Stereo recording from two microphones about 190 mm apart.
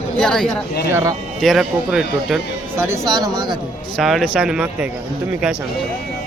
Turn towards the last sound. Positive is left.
turn(degrees=-5)  # may be behind; listen again after turning